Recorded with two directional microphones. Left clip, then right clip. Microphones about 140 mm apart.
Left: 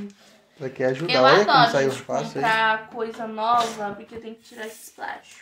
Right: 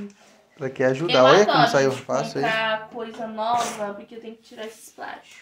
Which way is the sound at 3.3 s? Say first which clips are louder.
Left 2 dB; centre (ahead or behind).